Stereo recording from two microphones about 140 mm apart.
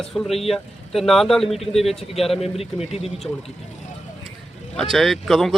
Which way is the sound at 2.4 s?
45° left (ahead or behind).